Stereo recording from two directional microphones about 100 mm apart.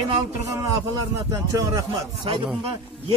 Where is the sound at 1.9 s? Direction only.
55° right (ahead or behind).